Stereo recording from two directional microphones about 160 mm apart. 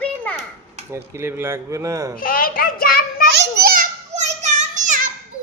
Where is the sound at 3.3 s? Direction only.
65° right (ahead or behind).